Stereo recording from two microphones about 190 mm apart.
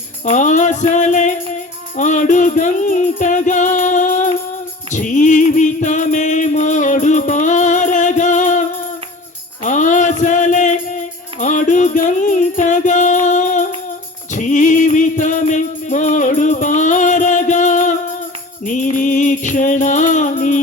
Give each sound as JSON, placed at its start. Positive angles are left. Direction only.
{"t": 0.3, "sound": "music", "side_deg": 40}
{"t": 9.6, "sound": "music", "side_deg": 40}